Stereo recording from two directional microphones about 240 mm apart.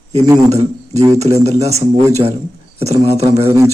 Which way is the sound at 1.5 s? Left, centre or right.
Right.